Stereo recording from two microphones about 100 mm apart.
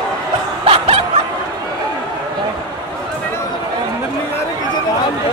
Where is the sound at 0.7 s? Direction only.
85° right.